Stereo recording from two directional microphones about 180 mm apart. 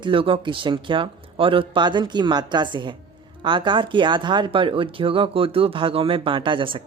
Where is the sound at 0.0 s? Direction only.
30° right (ahead or behind).